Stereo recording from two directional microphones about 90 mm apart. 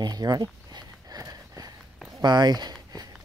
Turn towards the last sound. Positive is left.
turn(degrees=-45)  # may be behind; listen again after turning